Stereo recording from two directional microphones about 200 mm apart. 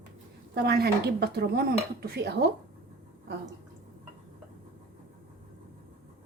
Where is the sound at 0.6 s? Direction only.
50° right (ahead or behind).